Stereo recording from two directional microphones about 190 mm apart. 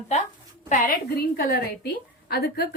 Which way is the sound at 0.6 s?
45° left (ahead or behind).